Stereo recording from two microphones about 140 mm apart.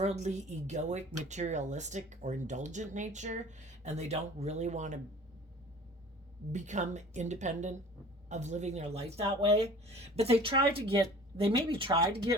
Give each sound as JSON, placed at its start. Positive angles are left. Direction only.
{"t": 0.0, "sound": "speech", "side_deg": -55}
{"t": 6.5, "sound": "speech", "side_deg": -60}